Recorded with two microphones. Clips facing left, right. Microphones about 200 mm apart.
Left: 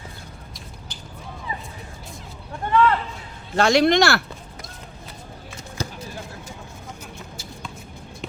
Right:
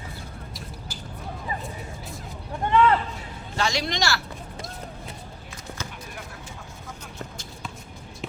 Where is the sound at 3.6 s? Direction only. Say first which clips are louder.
Left 10 dB; 60° left (ahead or behind).